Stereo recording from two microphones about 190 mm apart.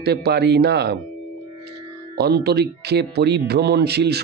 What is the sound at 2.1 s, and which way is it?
Speech, 60° right (ahead or behind).